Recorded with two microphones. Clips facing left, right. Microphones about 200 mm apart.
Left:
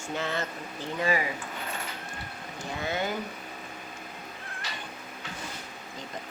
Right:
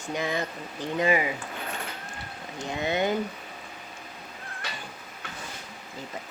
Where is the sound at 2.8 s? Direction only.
20° right (ahead or behind).